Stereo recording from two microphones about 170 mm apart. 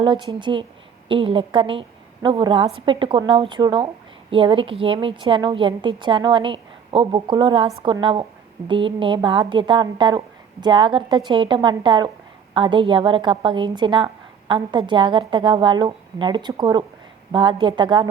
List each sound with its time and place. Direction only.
0.0 s a woman's voice: 30° right (ahead or behind)